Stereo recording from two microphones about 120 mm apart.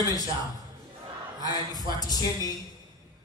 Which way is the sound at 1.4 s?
35° left (ahead or behind).